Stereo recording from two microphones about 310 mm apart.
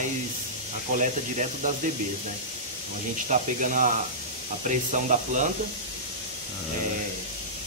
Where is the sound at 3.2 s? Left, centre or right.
Right.